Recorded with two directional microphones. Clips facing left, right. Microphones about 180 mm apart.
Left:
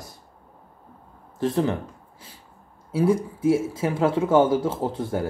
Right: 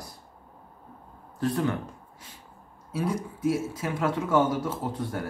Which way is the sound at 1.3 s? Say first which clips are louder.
Left 4 dB; 25° left (ahead or behind).